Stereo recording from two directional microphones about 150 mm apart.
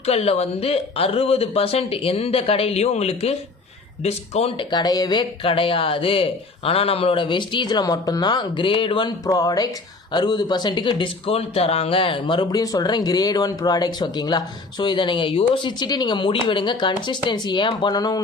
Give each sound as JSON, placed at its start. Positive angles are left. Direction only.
{"t": 0.0, "sound": "speech", "side_deg": 45}
{"t": 4.7, "sound": "speech", "side_deg": 25}